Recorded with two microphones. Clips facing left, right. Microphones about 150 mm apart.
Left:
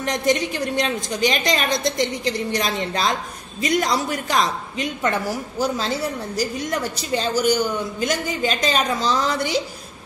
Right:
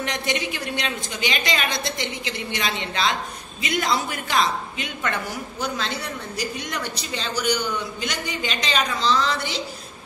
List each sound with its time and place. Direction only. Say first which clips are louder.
0.0 s a woman's voice: left 6 dB; 40° left (ahead or behind)
7.3 s a man's voice: left 4 dB; 10° left (ahead or behind)
8.0 s a woman's voice: left 6 dB; 45° left (ahead or behind)